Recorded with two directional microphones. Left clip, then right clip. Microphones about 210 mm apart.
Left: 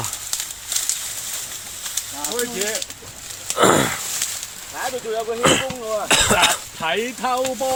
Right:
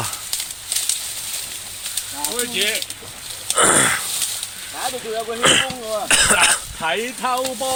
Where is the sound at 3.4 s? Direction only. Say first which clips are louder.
Even; 5° right (ahead or behind).